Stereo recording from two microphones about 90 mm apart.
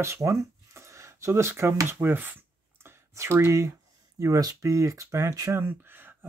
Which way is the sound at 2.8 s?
25° right (ahead or behind).